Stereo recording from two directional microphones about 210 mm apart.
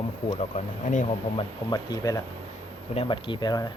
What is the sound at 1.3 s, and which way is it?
Speech, 20° left (ahead or behind).